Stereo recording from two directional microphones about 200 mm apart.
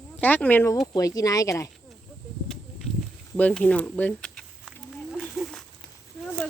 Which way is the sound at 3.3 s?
5° left (ahead or behind).